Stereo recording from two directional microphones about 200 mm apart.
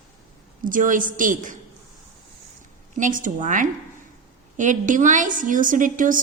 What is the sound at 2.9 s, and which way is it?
A woman's voice, 40° right (ahead or behind).